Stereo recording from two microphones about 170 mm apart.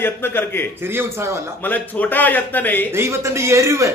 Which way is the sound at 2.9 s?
15° right (ahead or behind).